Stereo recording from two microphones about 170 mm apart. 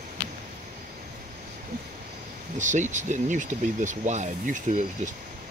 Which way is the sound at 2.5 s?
45° right (ahead or behind).